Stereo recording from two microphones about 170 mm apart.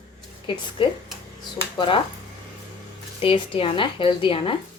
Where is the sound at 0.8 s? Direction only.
30° left (ahead or behind).